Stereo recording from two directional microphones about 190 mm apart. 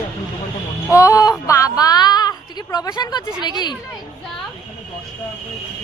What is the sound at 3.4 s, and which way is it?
Speech, 20° left (ahead or behind).